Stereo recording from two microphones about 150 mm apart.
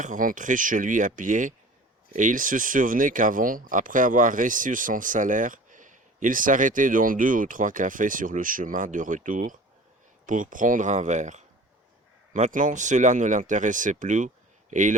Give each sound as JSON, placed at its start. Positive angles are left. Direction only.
{"t": 0.0, "sound": "speech", "side_deg": -60}